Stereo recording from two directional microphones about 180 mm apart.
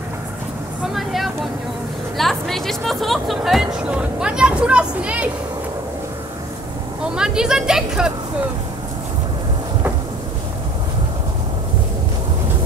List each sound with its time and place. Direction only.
0.9 s vehicle: centre (ahead or behind)
2.1 s music: centre (ahead or behind)
7.2 s a woman's voice: 5° right (ahead or behind)